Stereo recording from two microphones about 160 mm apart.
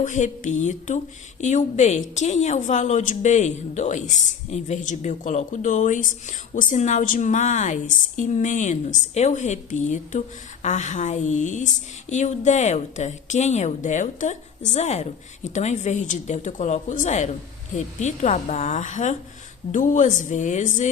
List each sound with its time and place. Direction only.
0.0 s a woman's voice: 50° left (ahead or behind)